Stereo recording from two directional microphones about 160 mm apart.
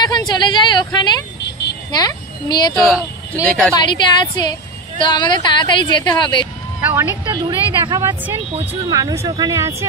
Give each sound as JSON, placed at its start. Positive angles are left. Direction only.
{"t": 0.1, "sound": "a woman's voice", "side_deg": 25}
{"t": 2.7, "sound": "speech", "side_deg": 0}
{"t": 3.7, "sound": "a woman's voice", "side_deg": 30}
{"t": 6.8, "sound": "speech", "side_deg": -10}
{"t": 7.2, "sound": "a woman's voice", "side_deg": -25}